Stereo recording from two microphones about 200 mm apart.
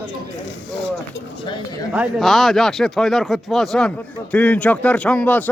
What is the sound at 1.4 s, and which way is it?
Speech, 25° left (ahead or behind).